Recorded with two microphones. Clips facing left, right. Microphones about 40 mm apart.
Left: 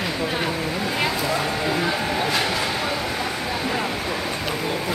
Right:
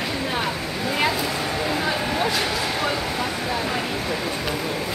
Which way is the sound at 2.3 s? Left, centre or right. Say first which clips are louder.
Left 1 dB; centre.